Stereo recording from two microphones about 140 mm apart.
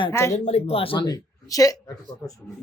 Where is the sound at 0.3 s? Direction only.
50° left (ahead or behind); by 1.8 s 25° left (ahead or behind).